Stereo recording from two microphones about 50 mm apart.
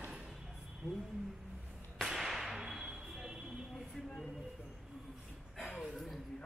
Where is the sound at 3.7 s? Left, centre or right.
Centre.